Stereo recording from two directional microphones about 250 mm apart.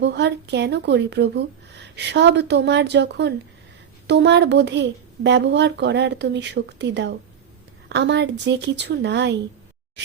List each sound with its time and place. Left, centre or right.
0.0 s a woman's voice: right